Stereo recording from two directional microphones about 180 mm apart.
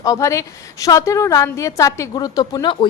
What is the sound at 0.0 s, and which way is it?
A woman's voice, 20° left (ahead or behind).